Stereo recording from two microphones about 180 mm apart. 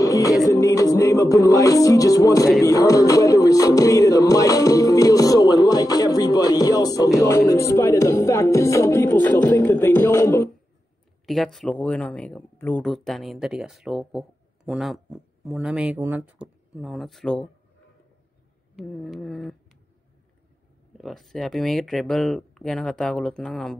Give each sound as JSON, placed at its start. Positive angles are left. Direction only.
{"t": 0.0, "sound": "music", "side_deg": 20}
{"t": 9.3, "sound": "speech", "side_deg": 15}
{"t": 11.2, "sound": "speech", "side_deg": 0}
{"t": 18.8, "sound": "speech", "side_deg": 0}
{"t": 21.0, "sound": "speech", "side_deg": 0}